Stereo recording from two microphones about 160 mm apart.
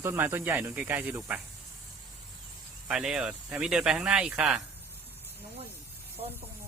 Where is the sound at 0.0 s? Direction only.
15° right (ahead or behind).